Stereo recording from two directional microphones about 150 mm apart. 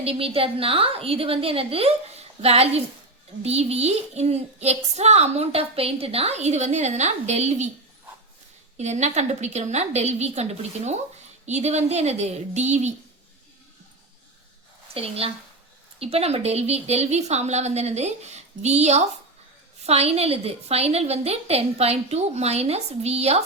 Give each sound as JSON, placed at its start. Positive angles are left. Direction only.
{"t": 0.0, "sound": "a woman's voice", "side_deg": -40}
{"t": 8.8, "sound": "speech", "side_deg": -50}
{"t": 14.9, "sound": "a woman's voice", "side_deg": -40}